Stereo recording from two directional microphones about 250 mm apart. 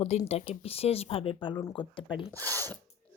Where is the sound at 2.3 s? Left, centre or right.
Centre.